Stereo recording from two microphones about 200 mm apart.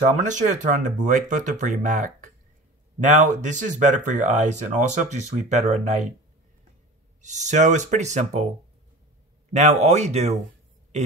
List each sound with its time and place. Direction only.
0.1 s speech: 40° right (ahead or behind)
7.2 s speech: 35° right (ahead or behind)
9.5 s speech: 35° right (ahead or behind)